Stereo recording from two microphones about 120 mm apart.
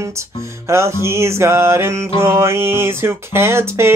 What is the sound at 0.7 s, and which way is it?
Music, 20° right (ahead or behind).